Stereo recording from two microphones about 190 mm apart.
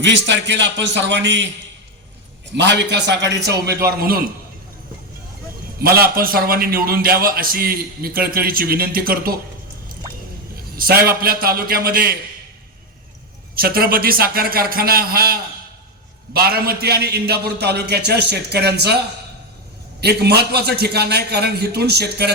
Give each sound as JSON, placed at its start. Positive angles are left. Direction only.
{"t": 0.0, "sound": "a man's voice", "side_deg": -70}
{"t": 2.6, "sound": "a man's voice", "side_deg": -65}
{"t": 5.8, "sound": "a man's voice", "side_deg": -50}
{"t": 10.8, "sound": "a man's voice", "side_deg": -50}
{"t": 13.6, "sound": "a man's voice", "side_deg": -50}